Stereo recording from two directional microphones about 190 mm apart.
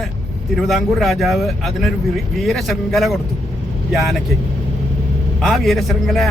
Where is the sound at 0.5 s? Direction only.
Centre (ahead or behind).